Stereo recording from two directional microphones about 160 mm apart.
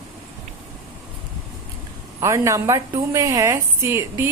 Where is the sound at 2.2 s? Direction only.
20° right (ahead or behind).